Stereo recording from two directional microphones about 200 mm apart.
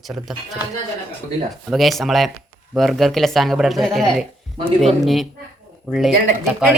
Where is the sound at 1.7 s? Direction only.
Centre (ahead or behind).